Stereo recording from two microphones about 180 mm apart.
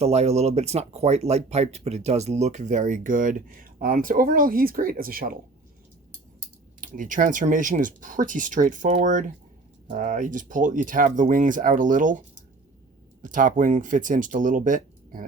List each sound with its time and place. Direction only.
0.0 s speech: 35° right (ahead or behind); by 5.4 s 55° right (ahead or behind)
6.8 s speech: 50° right (ahead or behind)
13.2 s speech: 45° right (ahead or behind)